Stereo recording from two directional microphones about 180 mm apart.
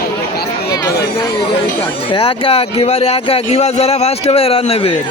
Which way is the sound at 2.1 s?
30° left (ahead or behind).